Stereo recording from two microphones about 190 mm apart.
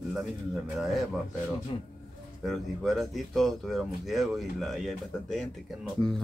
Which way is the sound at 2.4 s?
Centre (ahead or behind).